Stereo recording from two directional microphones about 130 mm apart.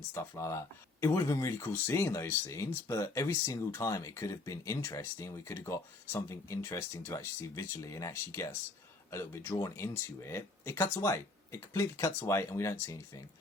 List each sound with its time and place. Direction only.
0.1 s speech: 20° left (ahead or behind)